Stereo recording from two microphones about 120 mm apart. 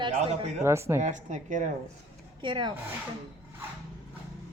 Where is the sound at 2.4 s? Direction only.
40° right (ahead or behind).